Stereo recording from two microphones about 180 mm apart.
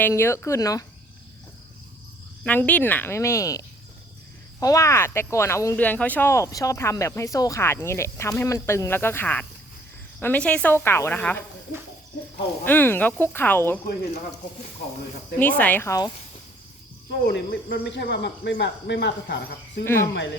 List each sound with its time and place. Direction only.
0.0 s speech: 15° left (ahead or behind)
2.4 s speech: 10° left (ahead or behind)
12.6 s speech: 10° left (ahead or behind)
15.4 s speech: 10° left (ahead or behind)
17.1 s speech: 70° left (ahead or behind)
19.8 s speech: 15° left (ahead or behind)